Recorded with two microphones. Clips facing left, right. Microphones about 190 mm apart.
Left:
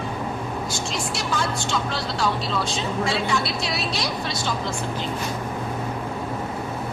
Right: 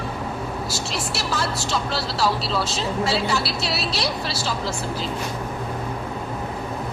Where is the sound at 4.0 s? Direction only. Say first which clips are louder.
Right 1 dB; 30° right (ahead or behind).